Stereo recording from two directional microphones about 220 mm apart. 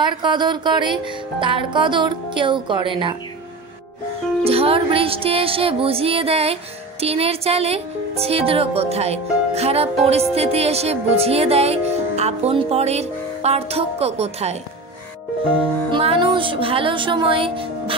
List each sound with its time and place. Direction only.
0.0 s music: 20° right (ahead or behind)
4.5 s music: 25° right (ahead or behind)